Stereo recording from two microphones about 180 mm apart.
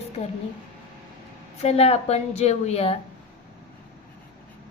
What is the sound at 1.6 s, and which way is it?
A woman's voice, 35° left (ahead or behind).